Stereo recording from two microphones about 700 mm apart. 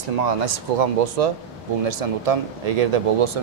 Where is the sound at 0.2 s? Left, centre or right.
Right.